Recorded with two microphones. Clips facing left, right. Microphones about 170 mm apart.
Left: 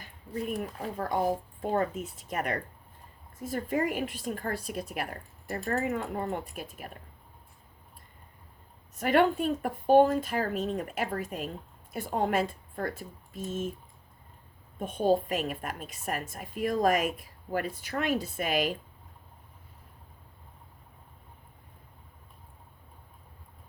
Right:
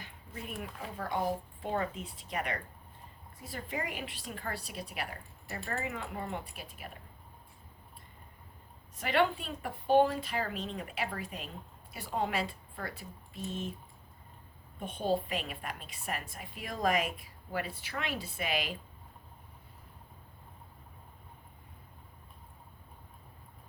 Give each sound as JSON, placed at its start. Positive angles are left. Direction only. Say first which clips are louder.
{"t": 0.0, "sound": "a woman's voice", "louder": "left 10 dB", "side_deg": 40}
{"t": 9.0, "sound": "a woman's voice", "louder": "left 5 dB", "side_deg": 45}
{"t": 14.8, "sound": "a woman's voice", "louder": "left 6 dB", "side_deg": 45}